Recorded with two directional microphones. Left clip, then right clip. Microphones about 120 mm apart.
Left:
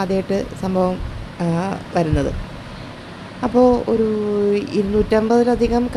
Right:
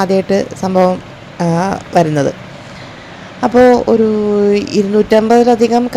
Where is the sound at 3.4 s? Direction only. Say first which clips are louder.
Right 7 dB; 30° right (ahead or behind).